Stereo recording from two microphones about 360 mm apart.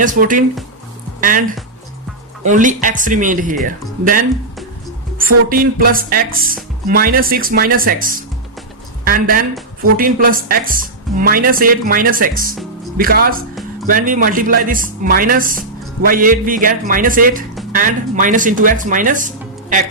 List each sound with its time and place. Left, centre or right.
0.0 s speech: right